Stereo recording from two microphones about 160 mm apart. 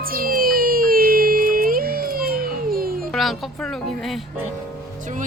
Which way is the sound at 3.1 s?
Centre (ahead or behind).